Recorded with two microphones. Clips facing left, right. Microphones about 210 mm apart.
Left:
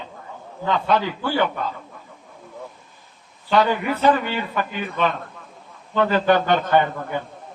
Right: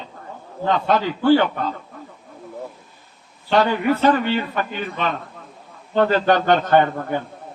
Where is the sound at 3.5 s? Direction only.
45° right (ahead or behind).